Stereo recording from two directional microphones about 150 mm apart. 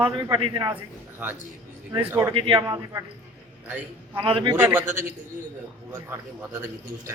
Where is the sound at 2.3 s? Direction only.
35° right (ahead or behind).